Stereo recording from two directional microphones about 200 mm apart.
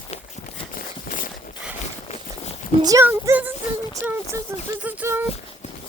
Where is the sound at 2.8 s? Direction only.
15° right (ahead or behind).